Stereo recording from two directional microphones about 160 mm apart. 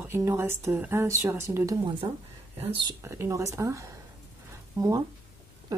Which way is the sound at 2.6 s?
35° right (ahead or behind).